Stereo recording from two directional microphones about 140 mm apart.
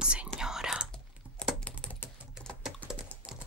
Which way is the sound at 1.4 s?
5° left (ahead or behind).